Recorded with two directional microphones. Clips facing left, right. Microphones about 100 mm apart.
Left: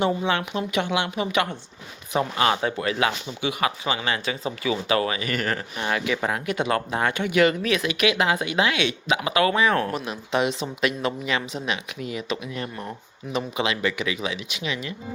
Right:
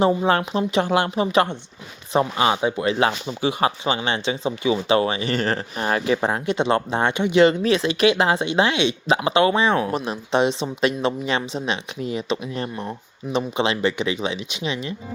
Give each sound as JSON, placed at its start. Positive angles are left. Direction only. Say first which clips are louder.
{"t": 0.0, "sound": "a woman's voice", "louder": "right 5 dB", "side_deg": -35}